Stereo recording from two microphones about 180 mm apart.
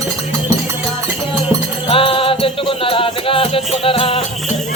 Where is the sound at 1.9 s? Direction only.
30° left (ahead or behind).